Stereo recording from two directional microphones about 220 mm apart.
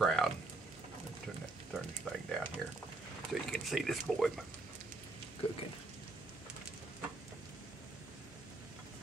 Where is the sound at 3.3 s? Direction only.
Centre (ahead or behind).